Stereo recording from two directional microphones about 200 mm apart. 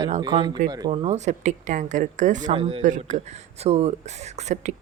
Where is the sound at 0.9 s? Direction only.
35° right (ahead or behind).